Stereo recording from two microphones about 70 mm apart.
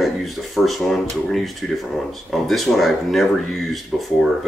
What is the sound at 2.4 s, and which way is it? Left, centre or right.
Speech, centre.